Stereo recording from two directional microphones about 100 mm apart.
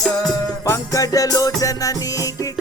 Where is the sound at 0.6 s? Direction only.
35° left (ahead or behind).